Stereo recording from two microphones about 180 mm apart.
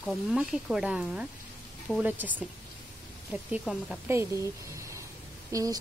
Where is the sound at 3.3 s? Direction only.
5° right (ahead or behind).